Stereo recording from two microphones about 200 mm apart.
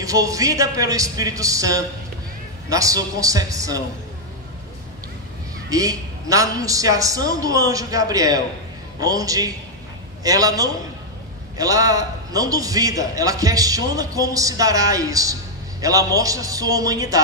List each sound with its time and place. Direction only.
0.0 s a man's voice: 15° right (ahead or behind)
5.7 s a man's voice: 15° right (ahead or behind)